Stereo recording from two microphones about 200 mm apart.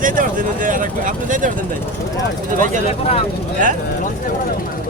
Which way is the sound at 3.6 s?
40° right (ahead or behind).